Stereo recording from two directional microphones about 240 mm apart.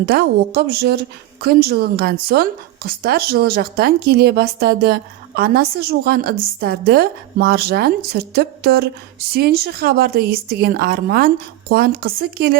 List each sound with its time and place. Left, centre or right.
0.0 s a woman's voice: right